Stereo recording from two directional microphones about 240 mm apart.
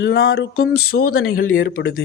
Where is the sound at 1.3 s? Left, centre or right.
Left.